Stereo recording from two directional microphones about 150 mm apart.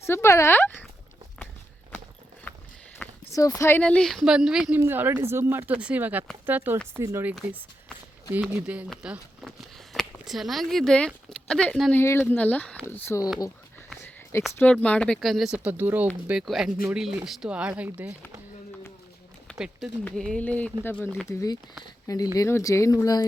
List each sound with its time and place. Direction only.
0.0 s speech: 15° left (ahead or behind)
2.5 s a sound: 15° left (ahead or behind)
3.3 s speech: 20° left (ahead or behind)
3.8 s speech: 5° left (ahead or behind)
13.1 s speech: 20° left (ahead or behind)
14.6 s speech: 10° left (ahead or behind); by 18.1 s 10° right (ahead or behind)
19.5 s speech: 5° right (ahead or behind)
21.2 s speech: 25° left (ahead or behind)